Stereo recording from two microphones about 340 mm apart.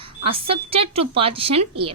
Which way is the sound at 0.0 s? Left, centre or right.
Centre.